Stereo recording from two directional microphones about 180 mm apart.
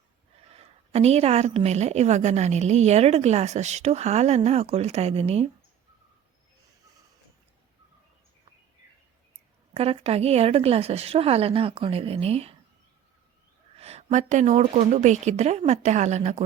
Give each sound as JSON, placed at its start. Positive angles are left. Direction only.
{"t": 0.4, "sound": "a woman's voice", "side_deg": -35}
{"t": 9.7, "sound": "a woman's voice", "side_deg": -35}
{"t": 13.7, "sound": "a woman's voice", "side_deg": -35}